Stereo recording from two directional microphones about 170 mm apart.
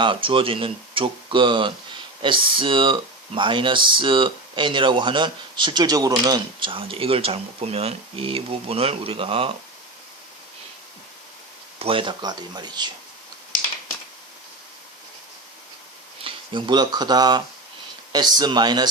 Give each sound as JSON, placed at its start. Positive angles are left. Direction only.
{"t": 0.0, "sound": "speech", "side_deg": -30}
{"t": 11.8, "sound": "speech", "side_deg": -30}
{"t": 16.2, "sound": "speech", "side_deg": -30}